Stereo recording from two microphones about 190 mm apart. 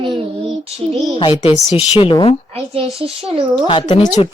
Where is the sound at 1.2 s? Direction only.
25° left (ahead or behind).